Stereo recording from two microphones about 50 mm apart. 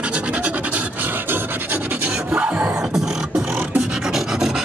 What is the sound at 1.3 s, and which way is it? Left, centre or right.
Filing, right.